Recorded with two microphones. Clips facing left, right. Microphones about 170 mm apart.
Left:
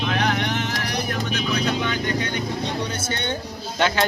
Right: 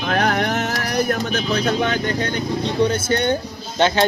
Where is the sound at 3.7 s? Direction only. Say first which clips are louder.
Right 4 dB; 30° right (ahead or behind).